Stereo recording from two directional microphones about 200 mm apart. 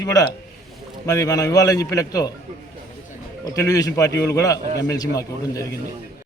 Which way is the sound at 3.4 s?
15° left (ahead or behind).